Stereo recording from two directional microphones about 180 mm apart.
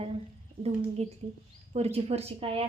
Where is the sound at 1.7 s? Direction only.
35° right (ahead or behind).